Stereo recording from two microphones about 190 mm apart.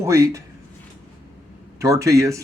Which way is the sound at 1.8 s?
15° right (ahead or behind).